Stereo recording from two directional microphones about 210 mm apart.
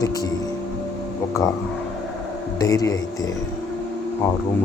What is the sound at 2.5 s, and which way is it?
Speech, 15° left (ahead or behind).